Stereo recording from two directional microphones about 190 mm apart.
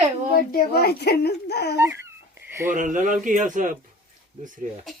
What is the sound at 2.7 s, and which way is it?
Speech, 40° right (ahead or behind).